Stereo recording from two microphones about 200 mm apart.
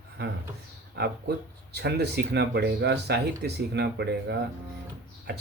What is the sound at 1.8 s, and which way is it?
Speech, 55° right (ahead or behind).